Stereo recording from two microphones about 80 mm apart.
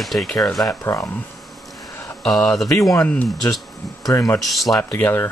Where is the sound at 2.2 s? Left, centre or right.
Centre.